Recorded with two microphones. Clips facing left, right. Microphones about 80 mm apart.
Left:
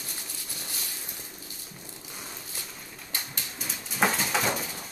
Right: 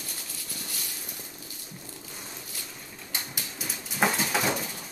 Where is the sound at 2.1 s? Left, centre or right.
Centre.